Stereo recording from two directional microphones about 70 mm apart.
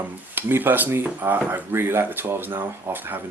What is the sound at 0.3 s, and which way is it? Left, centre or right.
Speech, right.